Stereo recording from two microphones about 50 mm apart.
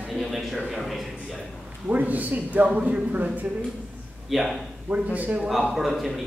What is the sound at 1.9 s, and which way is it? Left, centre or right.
Speech, right.